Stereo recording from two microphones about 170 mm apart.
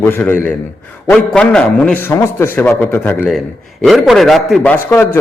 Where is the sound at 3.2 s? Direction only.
Centre (ahead or behind).